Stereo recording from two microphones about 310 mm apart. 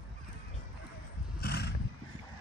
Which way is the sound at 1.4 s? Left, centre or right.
Left.